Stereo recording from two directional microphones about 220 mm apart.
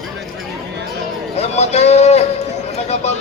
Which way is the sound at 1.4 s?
30° left (ahead or behind).